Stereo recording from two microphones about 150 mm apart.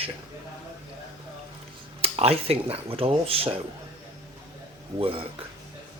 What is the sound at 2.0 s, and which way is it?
Speech, 40° right (ahead or behind).